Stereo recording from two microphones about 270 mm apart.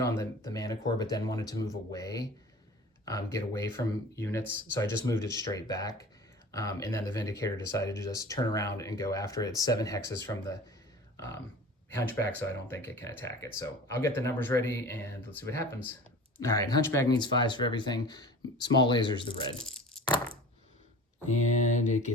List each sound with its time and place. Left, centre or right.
0.0 s speech: centre
3.3 s speech: centre
11.9 s speech: centre
21.5 s speech: left